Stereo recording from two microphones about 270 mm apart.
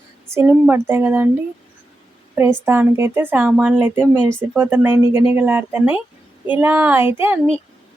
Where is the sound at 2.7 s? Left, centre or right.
Centre.